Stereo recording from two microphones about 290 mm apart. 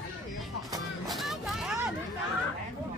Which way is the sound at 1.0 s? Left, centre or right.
Centre.